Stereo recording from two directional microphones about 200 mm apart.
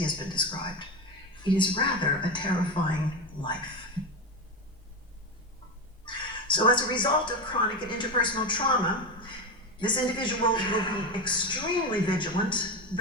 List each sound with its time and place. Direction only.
0.0 s a man's voice: 25° left (ahead or behind)
6.1 s speech: 25° left (ahead or behind)